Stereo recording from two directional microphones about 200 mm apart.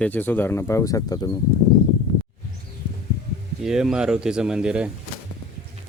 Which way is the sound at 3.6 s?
Centre (ahead or behind).